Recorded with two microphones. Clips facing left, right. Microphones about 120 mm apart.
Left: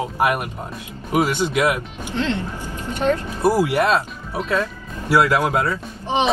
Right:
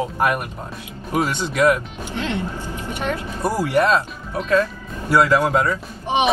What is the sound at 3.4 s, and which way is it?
Speech, 15° left (ahead or behind).